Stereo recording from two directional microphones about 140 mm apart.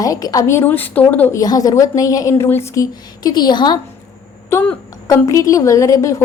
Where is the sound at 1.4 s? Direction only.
25° left (ahead or behind).